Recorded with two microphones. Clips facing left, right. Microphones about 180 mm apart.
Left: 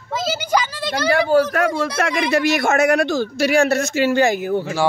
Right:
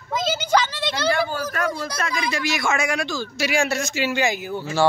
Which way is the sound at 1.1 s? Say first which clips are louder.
Left 9 dB; 75° left (ahead or behind).